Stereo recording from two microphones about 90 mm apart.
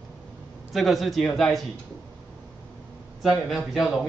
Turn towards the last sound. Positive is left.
turn(degrees=0)  # may be behind; listen again after turning